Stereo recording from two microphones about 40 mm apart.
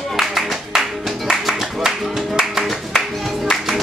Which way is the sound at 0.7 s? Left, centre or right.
Centre.